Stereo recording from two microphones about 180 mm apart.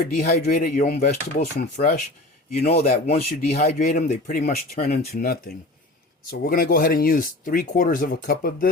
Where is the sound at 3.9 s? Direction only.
50° left (ahead or behind).